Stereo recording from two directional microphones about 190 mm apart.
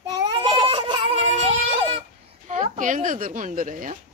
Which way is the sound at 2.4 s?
40° right (ahead or behind).